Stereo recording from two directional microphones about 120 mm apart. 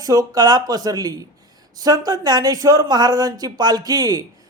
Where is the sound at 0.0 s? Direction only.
30° right (ahead or behind).